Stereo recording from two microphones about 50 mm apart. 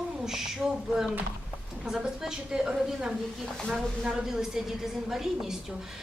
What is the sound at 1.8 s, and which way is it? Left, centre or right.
A woman's voice, centre.